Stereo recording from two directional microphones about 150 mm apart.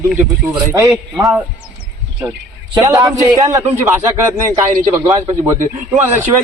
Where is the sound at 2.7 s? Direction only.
25° right (ahead or behind).